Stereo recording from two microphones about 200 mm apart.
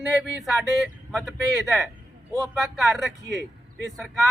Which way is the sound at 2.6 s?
Centre (ahead or behind).